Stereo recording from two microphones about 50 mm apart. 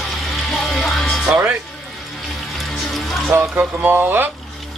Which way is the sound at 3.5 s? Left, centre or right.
Right.